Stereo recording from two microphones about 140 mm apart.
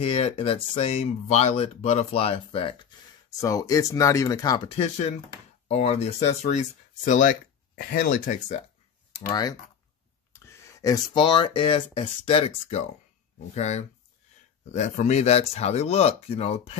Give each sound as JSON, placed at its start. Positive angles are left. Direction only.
{"t": 0.0, "sound": "speech", "side_deg": 45}
{"t": 4.6, "sound": "speech", "side_deg": 50}
{"t": 7.1, "sound": "speech", "side_deg": 65}
{"t": 9.3, "sound": "speech", "side_deg": 30}
{"t": 10.3, "sound": "a sound", "side_deg": 25}
{"t": 11.1, "sound": "speech", "side_deg": 35}